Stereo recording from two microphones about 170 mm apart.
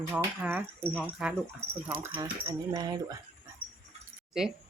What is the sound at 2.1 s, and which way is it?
Speech, 25° right (ahead or behind).